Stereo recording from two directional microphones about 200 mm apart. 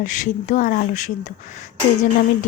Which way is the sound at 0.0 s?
40° left (ahead or behind).